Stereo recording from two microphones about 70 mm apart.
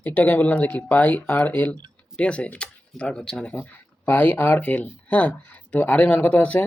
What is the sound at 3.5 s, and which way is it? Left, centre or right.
Speech, left.